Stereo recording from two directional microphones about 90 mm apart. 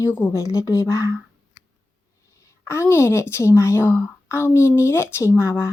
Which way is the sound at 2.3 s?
30° left (ahead or behind).